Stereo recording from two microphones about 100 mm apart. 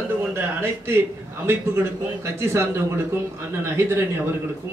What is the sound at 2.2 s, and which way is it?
A man's voice, 25° right (ahead or behind).